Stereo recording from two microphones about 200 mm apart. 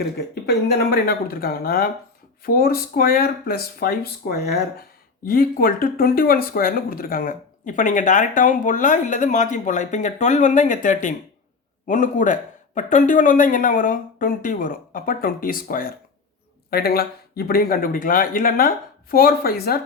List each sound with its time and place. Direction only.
0.4 s speech: 50° left (ahead or behind)